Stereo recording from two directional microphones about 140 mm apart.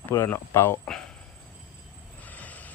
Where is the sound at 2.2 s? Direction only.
10° left (ahead or behind).